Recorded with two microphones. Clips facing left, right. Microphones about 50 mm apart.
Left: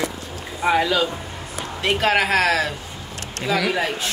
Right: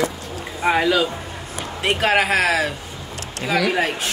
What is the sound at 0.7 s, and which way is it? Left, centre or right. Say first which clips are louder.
Speech: right 1 dB; right.